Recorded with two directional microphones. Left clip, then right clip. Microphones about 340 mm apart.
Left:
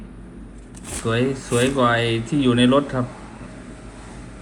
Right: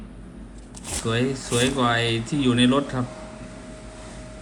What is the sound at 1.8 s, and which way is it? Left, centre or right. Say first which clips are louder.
Speech: left 3 dB; left.